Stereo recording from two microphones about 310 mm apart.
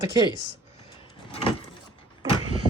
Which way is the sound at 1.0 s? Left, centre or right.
Centre.